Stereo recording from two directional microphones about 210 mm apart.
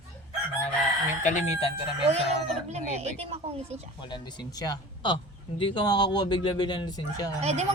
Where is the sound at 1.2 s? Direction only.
35° left (ahead or behind).